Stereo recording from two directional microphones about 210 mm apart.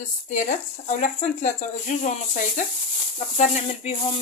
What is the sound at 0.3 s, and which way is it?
Speech, 35° left (ahead or behind).